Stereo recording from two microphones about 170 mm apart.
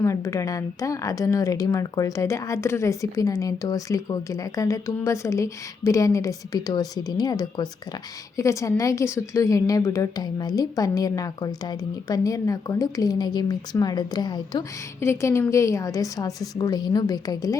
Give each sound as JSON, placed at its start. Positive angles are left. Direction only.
{"t": 0.0, "sound": "speech", "side_deg": 20}